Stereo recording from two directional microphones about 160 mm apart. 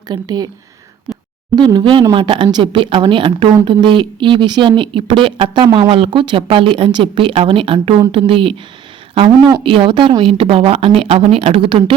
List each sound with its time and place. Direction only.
0.1 s speech: 25° right (ahead or behind)
1.1 s a sound: 10° right (ahead or behind)
1.5 s a woman's voice: 30° right (ahead or behind)
9.6 s a woman's voice: 35° right (ahead or behind)